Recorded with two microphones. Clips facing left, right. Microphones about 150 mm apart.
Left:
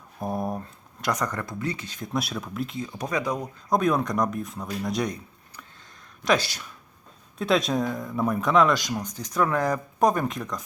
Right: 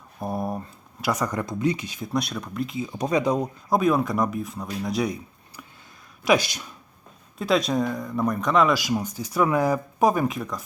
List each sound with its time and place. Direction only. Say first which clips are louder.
0.2 s speech: even; centre (ahead or behind)
2.1 s speech: right 2 dB; centre (ahead or behind)
3.0 s speech: right 6 dB; 20° right (ahead or behind)
3.7 s speech: right 1 dB; 5° right (ahead or behind)
6.2 s speech: right 3 dB; 15° right (ahead or behind)
7.3 s speech: right 1 dB; centre (ahead or behind)